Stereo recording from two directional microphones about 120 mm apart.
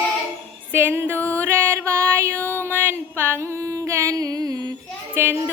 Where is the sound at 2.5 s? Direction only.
20° right (ahead or behind).